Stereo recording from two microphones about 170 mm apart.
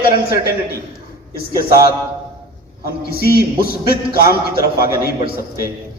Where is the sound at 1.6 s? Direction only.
60° left (ahead or behind).